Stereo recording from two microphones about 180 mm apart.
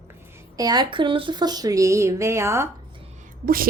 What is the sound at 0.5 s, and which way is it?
Speech, 20° right (ahead or behind).